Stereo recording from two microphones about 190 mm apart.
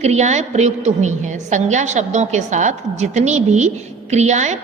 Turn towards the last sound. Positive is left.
turn(degrees=-35)  # may be behind; listen again after turning